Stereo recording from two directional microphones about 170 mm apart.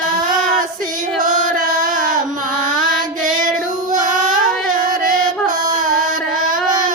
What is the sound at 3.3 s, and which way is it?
Female singing, 50° right (ahead or behind).